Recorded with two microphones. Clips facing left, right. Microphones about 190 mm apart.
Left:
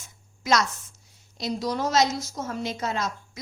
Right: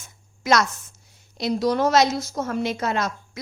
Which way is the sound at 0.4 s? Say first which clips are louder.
Right 3 dB; 60° right (ahead or behind).